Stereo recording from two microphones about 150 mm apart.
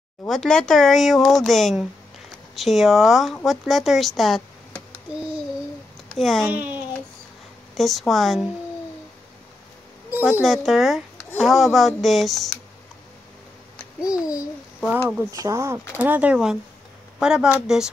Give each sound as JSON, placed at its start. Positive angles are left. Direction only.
{"t": 0.3, "sound": "speech", "side_deg": 5}
{"t": 6.1, "sound": "speech", "side_deg": 0}
{"t": 6.4, "sound": "speech", "side_deg": -10}
{"t": 7.7, "sound": "speech", "side_deg": 0}
{"t": 10.4, "sound": "speech", "side_deg": 0}
{"t": 14.0, "sound": "a child's voice", "side_deg": 25}
{"t": 15.3, "sound": "speech", "side_deg": -20}
{"t": 16.0, "sound": "speech", "side_deg": -10}